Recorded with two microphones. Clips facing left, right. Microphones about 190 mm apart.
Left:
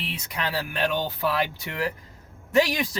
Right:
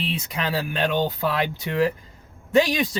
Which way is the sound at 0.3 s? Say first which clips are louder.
Right 2 dB; 20° right (ahead or behind).